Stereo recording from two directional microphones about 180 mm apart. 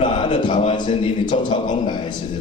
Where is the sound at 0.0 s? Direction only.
25° left (ahead or behind).